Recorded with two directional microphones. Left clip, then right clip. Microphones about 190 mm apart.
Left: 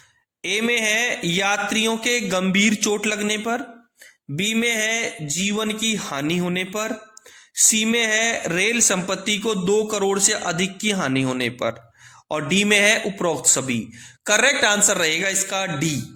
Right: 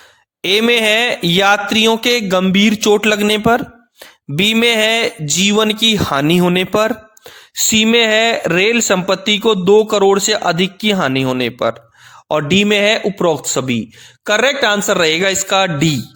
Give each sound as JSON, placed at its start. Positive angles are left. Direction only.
{"t": 0.4, "sound": "speech", "side_deg": -50}